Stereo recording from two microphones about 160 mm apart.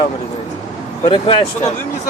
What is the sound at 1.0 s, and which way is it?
Speech, 30° left (ahead or behind).